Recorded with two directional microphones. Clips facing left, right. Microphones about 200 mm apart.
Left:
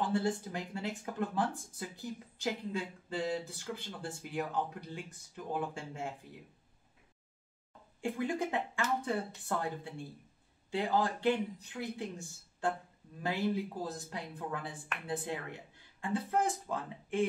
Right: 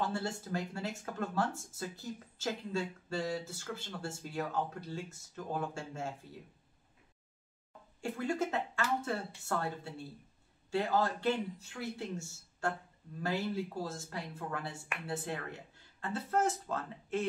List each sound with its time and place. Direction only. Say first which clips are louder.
0.0 s speech: left 4 dB; 15° left (ahead or behind)
8.0 s speech: even; 15° left (ahead or behind)